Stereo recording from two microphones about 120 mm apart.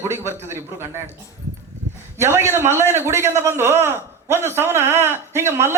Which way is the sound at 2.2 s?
20° right (ahead or behind).